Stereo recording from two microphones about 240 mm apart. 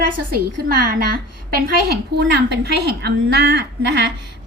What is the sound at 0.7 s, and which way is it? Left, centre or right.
A woman's voice, right.